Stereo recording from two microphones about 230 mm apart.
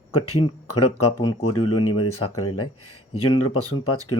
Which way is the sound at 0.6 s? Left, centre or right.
Left.